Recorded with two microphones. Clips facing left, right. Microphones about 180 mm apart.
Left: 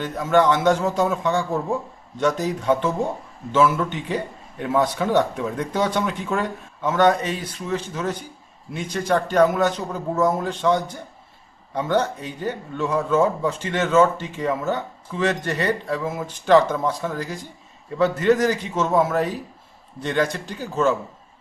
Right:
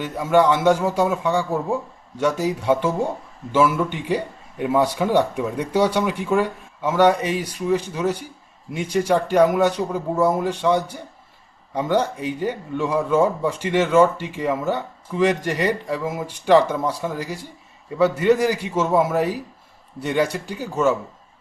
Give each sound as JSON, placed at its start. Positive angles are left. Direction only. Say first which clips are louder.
{"t": 0.0, "sound": "a man's voice", "louder": "right 1 dB", "side_deg": -10}